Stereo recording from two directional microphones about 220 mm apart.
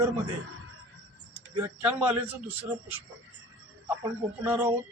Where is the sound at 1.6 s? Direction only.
5° right (ahead or behind).